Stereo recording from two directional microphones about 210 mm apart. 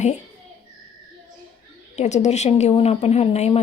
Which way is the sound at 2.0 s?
35° left (ahead or behind).